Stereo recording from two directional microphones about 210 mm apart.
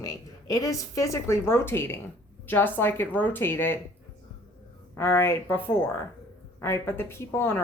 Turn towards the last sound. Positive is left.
turn(degrees=10)  # may be behind; listen again after turning